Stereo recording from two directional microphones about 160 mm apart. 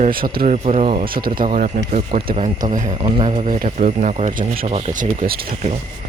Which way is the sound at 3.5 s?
55° right (ahead or behind).